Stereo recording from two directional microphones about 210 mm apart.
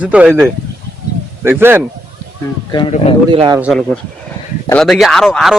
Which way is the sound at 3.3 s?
20° right (ahead or behind).